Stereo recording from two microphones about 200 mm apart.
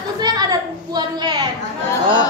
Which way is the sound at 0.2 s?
20° right (ahead or behind).